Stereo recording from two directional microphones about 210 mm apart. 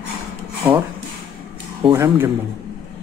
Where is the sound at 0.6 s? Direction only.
15° right (ahead or behind).